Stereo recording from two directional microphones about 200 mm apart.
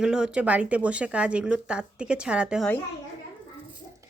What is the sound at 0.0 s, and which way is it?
Speech, 5° right (ahead or behind).